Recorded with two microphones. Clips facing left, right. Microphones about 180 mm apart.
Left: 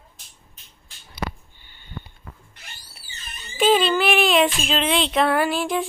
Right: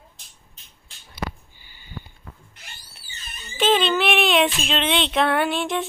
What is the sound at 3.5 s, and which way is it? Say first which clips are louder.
Speech: left 2 dB; centre (ahead or behind).